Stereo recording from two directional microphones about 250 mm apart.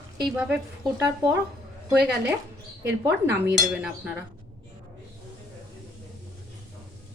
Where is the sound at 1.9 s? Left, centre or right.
Centre.